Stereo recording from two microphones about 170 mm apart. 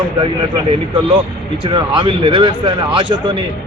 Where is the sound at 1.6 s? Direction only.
30° right (ahead or behind).